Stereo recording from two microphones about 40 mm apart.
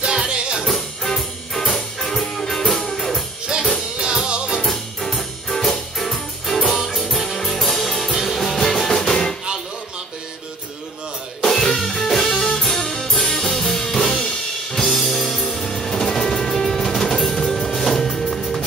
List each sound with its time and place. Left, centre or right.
0.3 s music: right
0.7 s music: centre
3.5 s music: centre
4.6 s music: centre
11.4 s music: centre